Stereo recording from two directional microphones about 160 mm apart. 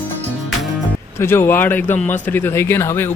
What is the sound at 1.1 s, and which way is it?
Speech, 15° left (ahead or behind).